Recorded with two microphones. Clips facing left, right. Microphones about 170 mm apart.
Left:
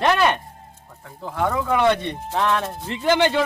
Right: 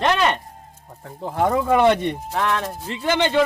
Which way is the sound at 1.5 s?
40° right (ahead or behind).